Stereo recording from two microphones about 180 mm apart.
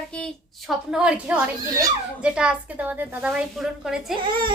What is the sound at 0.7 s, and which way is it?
Speech, 5° right (ahead or behind).